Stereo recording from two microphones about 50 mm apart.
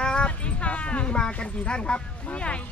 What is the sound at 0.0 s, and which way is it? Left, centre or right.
Dog, centre.